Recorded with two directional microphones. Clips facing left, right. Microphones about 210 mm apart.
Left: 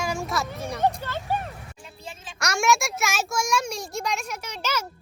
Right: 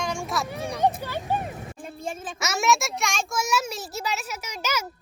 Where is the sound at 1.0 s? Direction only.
15° right (ahead or behind).